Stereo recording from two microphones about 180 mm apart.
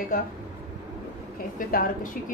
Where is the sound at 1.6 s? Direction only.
50° left (ahead or behind).